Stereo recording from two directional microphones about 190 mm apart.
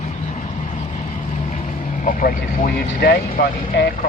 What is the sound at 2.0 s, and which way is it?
Speech, 45° left (ahead or behind).